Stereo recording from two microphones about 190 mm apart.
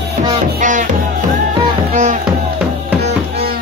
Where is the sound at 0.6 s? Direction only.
40° right (ahead or behind).